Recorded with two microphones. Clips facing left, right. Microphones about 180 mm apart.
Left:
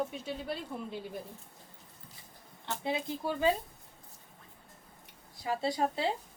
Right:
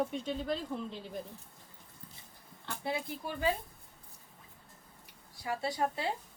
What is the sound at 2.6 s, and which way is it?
Speech, 20° left (ahead or behind).